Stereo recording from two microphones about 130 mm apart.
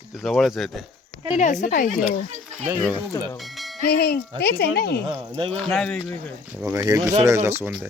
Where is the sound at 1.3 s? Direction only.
65° left (ahead or behind).